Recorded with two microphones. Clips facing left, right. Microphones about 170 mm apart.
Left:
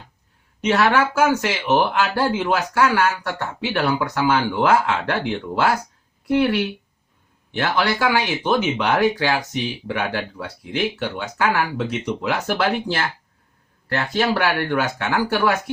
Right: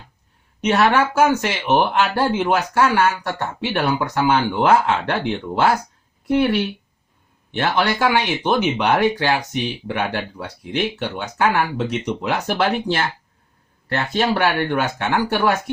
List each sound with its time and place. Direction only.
0.6 s speech: 20° right (ahead or behind)
6.2 s speech: 25° right (ahead or behind)